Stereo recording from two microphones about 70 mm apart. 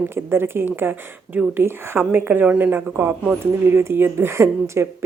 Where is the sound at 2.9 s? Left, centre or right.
Right.